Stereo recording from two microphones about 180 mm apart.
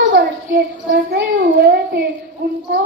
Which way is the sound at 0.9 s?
60° right (ahead or behind).